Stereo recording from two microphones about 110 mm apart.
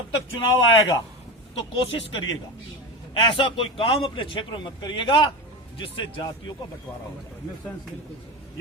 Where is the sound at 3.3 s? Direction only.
55° left (ahead or behind).